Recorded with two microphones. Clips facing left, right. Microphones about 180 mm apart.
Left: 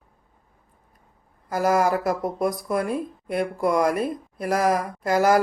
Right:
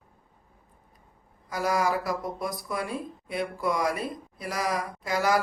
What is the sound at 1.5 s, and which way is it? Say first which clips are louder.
Speech: left 6 dB; 50° left (ahead or behind).